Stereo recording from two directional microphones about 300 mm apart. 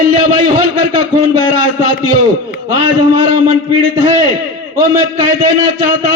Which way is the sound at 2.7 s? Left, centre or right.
Left.